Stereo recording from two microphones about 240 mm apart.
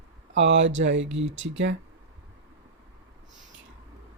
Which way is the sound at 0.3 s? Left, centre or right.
Right.